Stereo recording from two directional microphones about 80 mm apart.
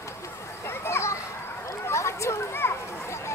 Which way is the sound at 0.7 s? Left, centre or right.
Left.